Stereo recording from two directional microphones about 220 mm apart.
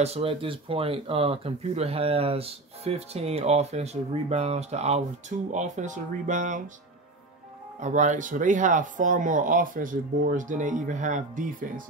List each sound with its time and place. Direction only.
0.0 s speech: 25° right (ahead or behind)
7.8 s speech: 35° right (ahead or behind)